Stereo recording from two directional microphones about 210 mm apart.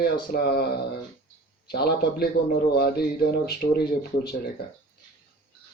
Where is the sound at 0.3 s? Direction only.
45° left (ahead or behind).